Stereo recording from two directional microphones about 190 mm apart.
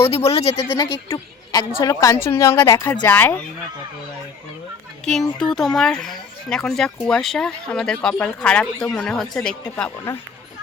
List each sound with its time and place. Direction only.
0.1 s a woman's voice: 30° left (ahead or behind); by 3.3 s 10° left (ahead or behind)
5.4 s speech: 5° left (ahead or behind)